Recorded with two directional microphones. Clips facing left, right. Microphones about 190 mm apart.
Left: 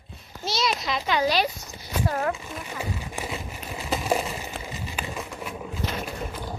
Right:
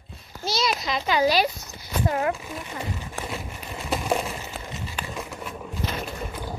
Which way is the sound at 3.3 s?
5° left (ahead or behind).